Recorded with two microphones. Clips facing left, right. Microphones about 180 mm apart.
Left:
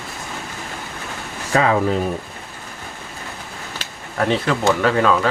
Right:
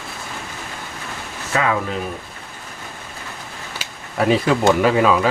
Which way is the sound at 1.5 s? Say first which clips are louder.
Left 3 dB; 35° left (ahead or behind).